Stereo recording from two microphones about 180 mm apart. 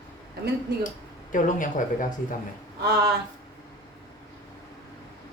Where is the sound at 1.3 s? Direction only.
45° left (ahead or behind).